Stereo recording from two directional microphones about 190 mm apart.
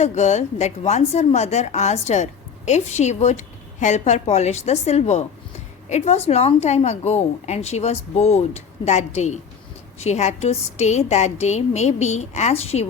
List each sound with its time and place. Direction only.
0.0 s a woman's voice: 35° left (ahead or behind)